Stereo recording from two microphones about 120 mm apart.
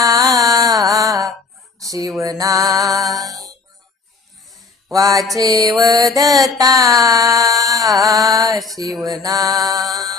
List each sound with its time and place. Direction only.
0.0 s music: 30° right (ahead or behind)
0.9 s mantra: 30° right (ahead or behind)
1.8 s music: 30° right (ahead or behind)
4.9 s music: 30° right (ahead or behind)
8.5 s music: centre (ahead or behind)
9.0 s music: 30° right (ahead or behind)
9.8 s music: centre (ahead or behind)